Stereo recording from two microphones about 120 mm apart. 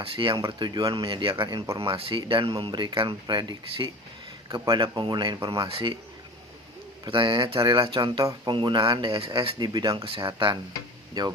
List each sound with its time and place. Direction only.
0.0 s speech: 45° right (ahead or behind)
5.6 s speech: 50° right (ahead or behind)
7.0 s speech: 40° right (ahead or behind)